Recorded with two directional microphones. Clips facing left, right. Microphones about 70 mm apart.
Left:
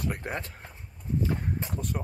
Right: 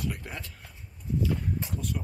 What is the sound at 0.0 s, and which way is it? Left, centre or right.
Speech, left.